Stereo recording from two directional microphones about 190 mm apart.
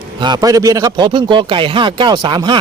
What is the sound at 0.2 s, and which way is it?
A man's voice, 20° right (ahead or behind).